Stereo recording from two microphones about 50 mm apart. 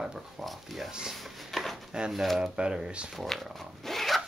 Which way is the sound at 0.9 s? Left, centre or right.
Centre.